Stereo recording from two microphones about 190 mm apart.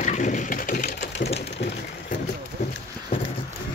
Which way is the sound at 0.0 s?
40° left (ahead or behind).